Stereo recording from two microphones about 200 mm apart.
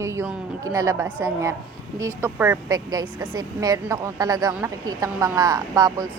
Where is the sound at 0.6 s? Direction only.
15° right (ahead or behind).